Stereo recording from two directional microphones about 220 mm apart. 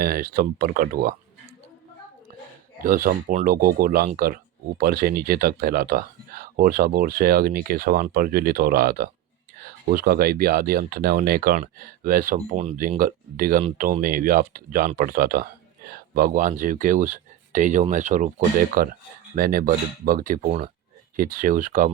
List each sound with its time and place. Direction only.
0.0 s speech: 40° right (ahead or behind)
2.8 s speech: 40° right (ahead or behind)